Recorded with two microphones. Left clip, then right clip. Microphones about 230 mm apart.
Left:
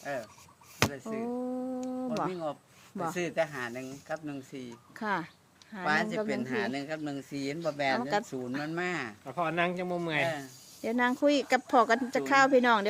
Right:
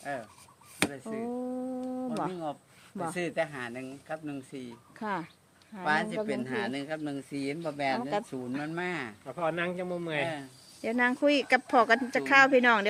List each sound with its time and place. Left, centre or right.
0.0 s speech: centre
0.9 s a sound: centre
3.0 s speech: centre
9.2 s speech: left
10.8 s speech: centre